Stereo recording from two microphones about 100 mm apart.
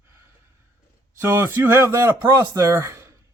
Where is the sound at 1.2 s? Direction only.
20° right (ahead or behind).